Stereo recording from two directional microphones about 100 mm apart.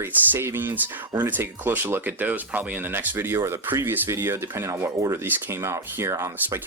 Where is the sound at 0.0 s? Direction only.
25° right (ahead or behind).